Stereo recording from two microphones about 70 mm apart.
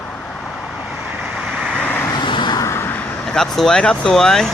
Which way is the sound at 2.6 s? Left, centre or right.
Left.